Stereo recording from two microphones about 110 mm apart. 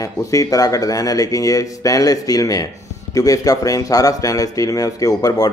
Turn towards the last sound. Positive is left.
turn(degrees=35)  # may be behind; listen again after turning